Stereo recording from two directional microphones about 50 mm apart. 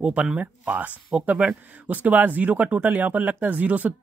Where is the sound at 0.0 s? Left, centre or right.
Right.